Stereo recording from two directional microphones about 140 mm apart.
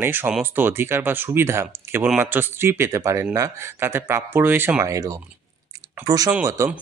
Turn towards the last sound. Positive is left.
turn(degrees=-20)  # may be behind; listen again after turning